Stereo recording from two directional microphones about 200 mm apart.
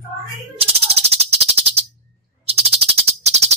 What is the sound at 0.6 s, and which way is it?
Music, 30° right (ahead or behind).